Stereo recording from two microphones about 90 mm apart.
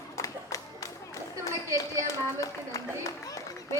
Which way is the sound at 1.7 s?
35° right (ahead or behind).